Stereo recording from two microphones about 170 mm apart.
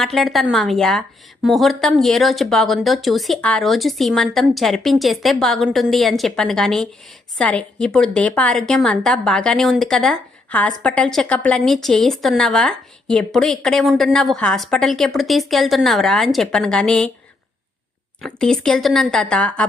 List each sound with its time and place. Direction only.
0.0 s a woman's voice: centre (ahead or behind)
18.2 s a woman's voice: 5° left (ahead or behind)